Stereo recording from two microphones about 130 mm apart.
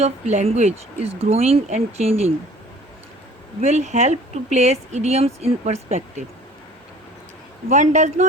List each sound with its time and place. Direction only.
0.0 s speech: 55° right (ahead or behind)
3.6 s speech: 60° right (ahead or behind)
7.7 s speech: 70° right (ahead or behind)